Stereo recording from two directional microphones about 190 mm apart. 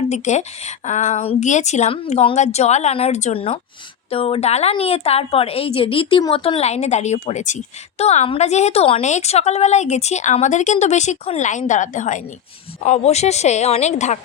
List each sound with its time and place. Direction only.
0.1 s a woman's voice: 35° left (ahead or behind)